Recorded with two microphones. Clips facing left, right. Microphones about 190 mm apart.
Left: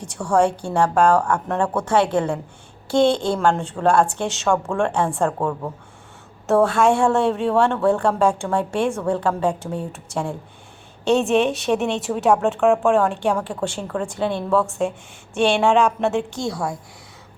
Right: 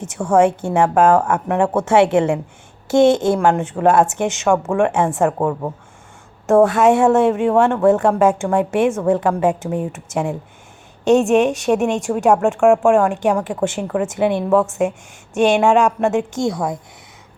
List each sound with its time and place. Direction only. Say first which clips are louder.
0.0 s a woman's voice: right 4 dB; 20° right (ahead or behind)